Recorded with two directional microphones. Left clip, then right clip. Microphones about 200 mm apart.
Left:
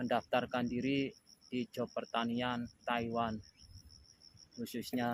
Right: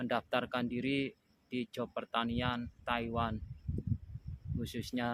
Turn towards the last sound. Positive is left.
turn(degrees=-55)  # may be behind; listen again after turning